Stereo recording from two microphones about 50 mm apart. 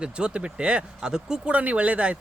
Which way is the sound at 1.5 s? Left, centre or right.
Right.